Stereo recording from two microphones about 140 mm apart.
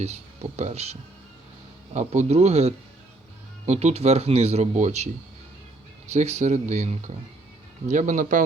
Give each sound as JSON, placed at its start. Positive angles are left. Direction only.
{"t": 0.0, "sound": "speech", "side_deg": -50}
{"t": 6.1, "sound": "speech", "side_deg": -55}